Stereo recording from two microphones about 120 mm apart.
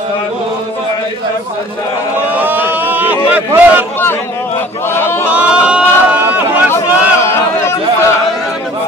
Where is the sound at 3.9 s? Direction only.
15° left (ahead or behind).